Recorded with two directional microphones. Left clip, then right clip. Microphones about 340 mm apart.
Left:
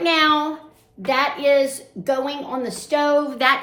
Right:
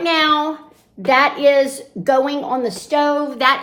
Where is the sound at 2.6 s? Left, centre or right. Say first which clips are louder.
Right 1 dB; centre.